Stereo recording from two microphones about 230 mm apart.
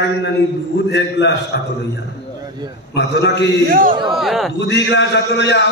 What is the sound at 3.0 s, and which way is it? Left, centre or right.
Speech, left.